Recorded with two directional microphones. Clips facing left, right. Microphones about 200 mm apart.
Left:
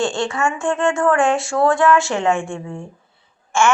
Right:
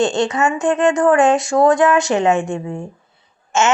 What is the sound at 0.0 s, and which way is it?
A woman's voice, 20° right (ahead or behind).